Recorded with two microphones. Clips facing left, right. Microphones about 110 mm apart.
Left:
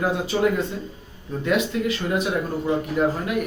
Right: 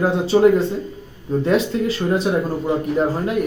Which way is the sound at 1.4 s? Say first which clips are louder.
Right 3 dB; 30° right (ahead or behind).